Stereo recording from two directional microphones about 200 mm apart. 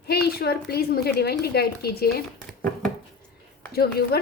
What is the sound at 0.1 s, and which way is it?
Speech, 50° left (ahead or behind).